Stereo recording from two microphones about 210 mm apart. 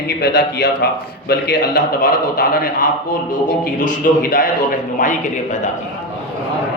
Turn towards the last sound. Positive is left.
turn(degrees=40)  # may be behind; listen again after turning